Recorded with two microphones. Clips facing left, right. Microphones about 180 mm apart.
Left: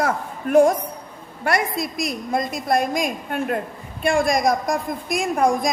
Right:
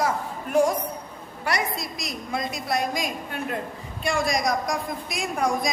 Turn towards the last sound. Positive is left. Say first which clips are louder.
# left 6 dB
turn(degrees=50)  # may be behind; listen again after turning